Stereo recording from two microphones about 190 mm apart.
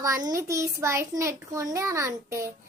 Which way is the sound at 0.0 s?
20° right (ahead or behind).